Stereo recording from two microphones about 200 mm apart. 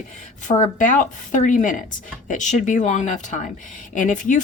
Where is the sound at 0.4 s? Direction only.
35° left (ahead or behind).